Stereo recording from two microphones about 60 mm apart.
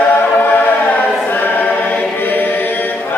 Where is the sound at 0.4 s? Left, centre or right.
Left.